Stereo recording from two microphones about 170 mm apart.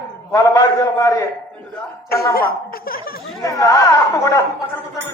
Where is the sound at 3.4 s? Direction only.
20° left (ahead or behind).